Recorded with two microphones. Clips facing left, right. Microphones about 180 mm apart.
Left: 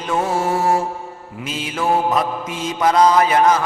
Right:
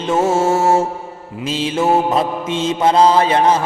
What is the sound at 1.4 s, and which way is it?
Mantra, 30° right (ahead or behind).